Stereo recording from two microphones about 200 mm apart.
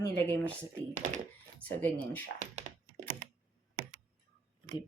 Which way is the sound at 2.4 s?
35° right (ahead or behind).